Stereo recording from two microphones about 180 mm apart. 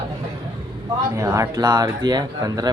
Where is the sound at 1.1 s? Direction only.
15° right (ahead or behind).